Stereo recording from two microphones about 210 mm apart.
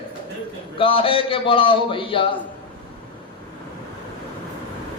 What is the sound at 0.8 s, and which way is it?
A man's voice, 25° left (ahead or behind).